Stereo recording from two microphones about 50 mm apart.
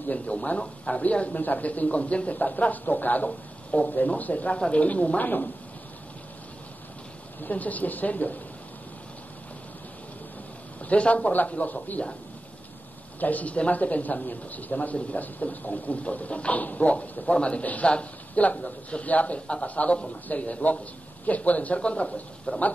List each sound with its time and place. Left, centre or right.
0.1 s speech: left
7.4 s speech: left
10.9 s speech: left
13.2 s speech: left